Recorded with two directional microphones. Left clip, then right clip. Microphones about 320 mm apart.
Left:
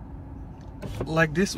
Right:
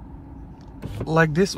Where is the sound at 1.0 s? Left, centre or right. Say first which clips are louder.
Right 4 dB; centre.